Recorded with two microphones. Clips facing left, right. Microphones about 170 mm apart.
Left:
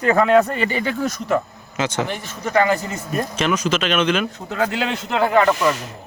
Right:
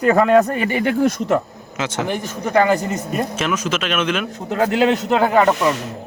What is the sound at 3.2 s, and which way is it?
Speech, 5° right (ahead or behind).